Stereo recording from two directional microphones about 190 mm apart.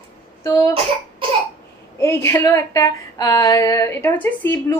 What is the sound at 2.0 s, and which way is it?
A woman's voice, 15° left (ahead or behind).